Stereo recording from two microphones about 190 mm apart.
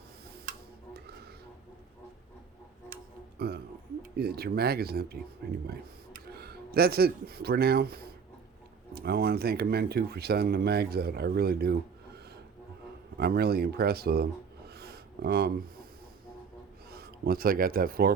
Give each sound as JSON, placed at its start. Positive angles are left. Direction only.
{"t": 2.9, "sound": "music", "side_deg": -60}
{"t": 4.1, "sound": "speech", "side_deg": -55}
{"t": 13.1, "sound": "speech", "side_deg": -55}
{"t": 14.7, "sound": "a sound", "side_deg": -55}
{"t": 16.9, "sound": "speech", "side_deg": -55}